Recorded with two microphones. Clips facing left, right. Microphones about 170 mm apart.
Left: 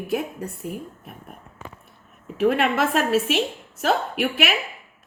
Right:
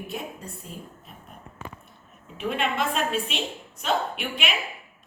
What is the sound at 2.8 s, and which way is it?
A woman's voice, 5° left (ahead or behind).